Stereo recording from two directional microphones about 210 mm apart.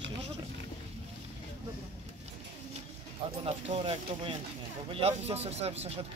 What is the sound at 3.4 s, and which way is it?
Speech, 25° right (ahead or behind).